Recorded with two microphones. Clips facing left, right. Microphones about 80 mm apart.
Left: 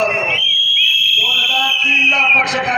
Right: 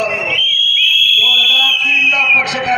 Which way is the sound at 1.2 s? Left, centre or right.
Centre.